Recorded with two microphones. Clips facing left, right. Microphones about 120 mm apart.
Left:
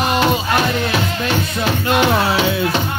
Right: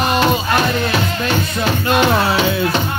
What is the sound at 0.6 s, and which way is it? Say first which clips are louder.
Music: right 1 dB; 40° right (ahead or behind).